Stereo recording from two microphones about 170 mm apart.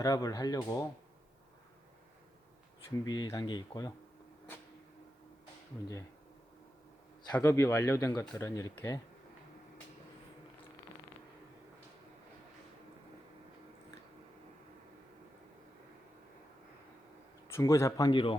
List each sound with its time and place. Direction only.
0.0 s speech: 20° left (ahead or behind)
3.0 s speech: 20° left (ahead or behind)
7.3 s speech: 15° left (ahead or behind)
17.5 s speech: 20° left (ahead or behind)